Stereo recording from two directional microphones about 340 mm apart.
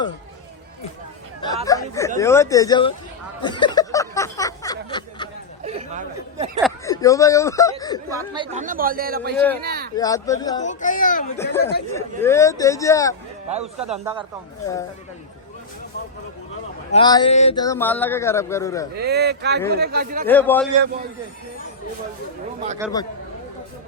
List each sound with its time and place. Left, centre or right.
1.6 s speech: centre
3.4 s a sound: centre
5.6 s speech: centre
6.6 s a sound: centre
6.9 s speech: centre
8.1 s speech: centre
9.9 s speech: centre
11.3 s speech: centre
13.7 s a man's voice: centre
16.9 s speech: centre
18.9 s speech: right
20.2 s a man's voice: centre
22.8 s a man's voice: centre